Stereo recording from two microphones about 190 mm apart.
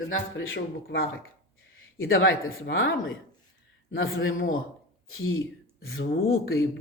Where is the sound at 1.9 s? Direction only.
90° left.